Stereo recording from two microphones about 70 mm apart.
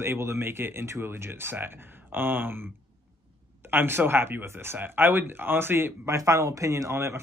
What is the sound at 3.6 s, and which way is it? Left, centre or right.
Speech, right.